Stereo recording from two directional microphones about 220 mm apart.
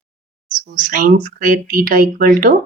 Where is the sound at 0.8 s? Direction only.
40° right (ahead or behind).